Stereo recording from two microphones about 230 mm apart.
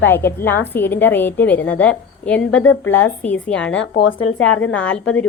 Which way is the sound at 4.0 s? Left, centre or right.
Left.